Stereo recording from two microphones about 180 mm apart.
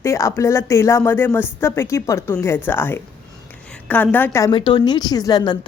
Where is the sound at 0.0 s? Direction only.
15° left (ahead or behind).